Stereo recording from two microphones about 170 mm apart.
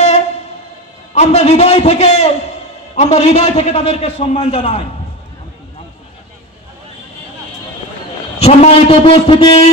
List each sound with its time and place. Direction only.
1.1 s a man's voice: 40° left (ahead or behind)
8.4 s a man's voice: 35° left (ahead or behind)